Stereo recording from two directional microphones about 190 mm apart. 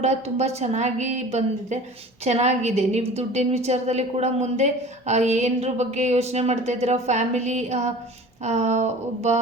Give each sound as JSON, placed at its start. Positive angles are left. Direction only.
{"t": 0.0, "sound": "a woman's voice", "side_deg": -35}